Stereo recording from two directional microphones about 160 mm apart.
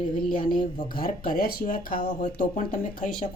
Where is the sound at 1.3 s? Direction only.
65° left (ahead or behind).